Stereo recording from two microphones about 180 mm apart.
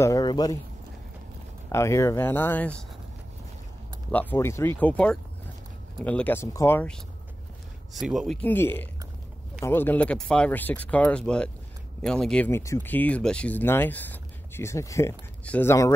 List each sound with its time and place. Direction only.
0.0 s speech: 20° left (ahead or behind)
1.7 s speech: 15° left (ahead or behind)
4.1 s speech: 10° left (ahead or behind)
7.9 s speech: centre (ahead or behind); by 15.9 s 15° left (ahead or behind)